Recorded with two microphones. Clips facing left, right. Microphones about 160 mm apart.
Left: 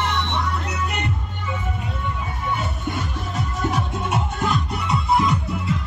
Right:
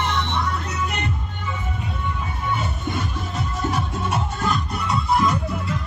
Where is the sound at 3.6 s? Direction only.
20° left (ahead or behind).